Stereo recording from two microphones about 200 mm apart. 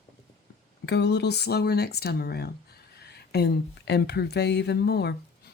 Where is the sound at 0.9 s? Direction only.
60° left (ahead or behind).